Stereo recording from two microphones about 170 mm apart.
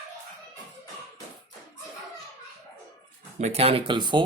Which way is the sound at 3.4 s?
35° right (ahead or behind).